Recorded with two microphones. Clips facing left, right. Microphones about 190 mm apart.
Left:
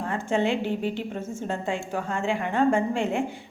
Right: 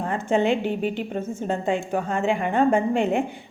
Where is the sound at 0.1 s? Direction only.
20° right (ahead or behind).